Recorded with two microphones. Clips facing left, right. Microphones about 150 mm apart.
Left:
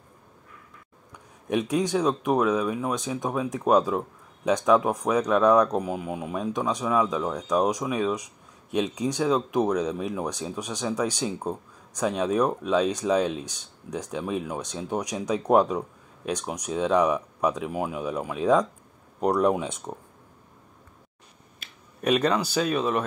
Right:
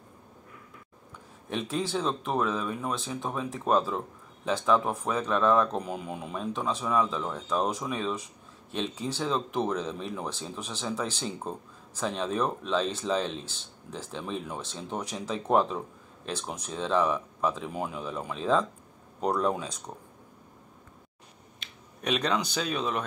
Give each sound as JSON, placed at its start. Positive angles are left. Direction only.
{"t": 1.5, "sound": "speech", "side_deg": 15}
{"t": 21.6, "sound": "a sound", "side_deg": 5}
{"t": 22.0, "sound": "speech", "side_deg": 5}